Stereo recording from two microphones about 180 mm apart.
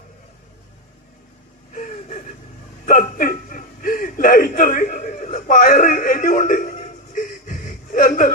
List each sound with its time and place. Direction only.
1.7 s gasp: 45° left (ahead or behind)
2.8 s chuckle: 50° left (ahead or behind)